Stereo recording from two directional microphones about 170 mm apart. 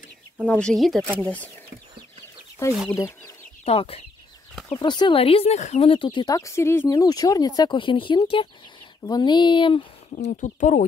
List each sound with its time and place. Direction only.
0.5 s speech: 5° left (ahead or behind)
2.7 s speech: 5° right (ahead or behind)
3.6 s speech: 35° left (ahead or behind)
10.1 s speech: 45° left (ahead or behind)